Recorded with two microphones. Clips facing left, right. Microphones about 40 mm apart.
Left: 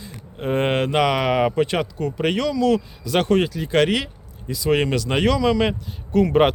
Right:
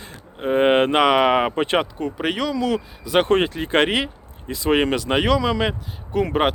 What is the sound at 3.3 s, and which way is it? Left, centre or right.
Speech, right.